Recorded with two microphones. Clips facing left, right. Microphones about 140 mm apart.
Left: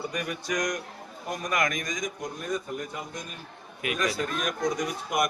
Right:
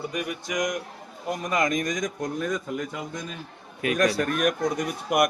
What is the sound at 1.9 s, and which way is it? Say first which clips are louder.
Speech: right 5 dB; 80° right.